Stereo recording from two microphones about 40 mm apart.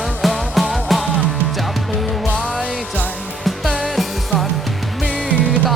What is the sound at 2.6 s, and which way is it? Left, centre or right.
Music, right.